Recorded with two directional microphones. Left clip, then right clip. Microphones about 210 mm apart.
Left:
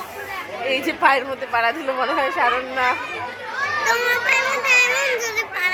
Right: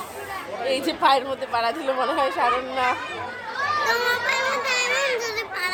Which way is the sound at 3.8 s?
10° right (ahead or behind).